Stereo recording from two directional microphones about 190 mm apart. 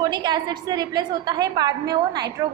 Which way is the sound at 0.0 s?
20° right (ahead or behind).